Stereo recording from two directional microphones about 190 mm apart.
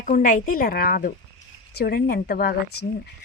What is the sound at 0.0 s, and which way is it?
Speech, 45° left (ahead or behind).